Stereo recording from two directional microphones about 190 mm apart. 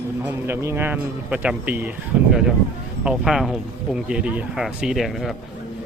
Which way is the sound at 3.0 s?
5° right (ahead or behind).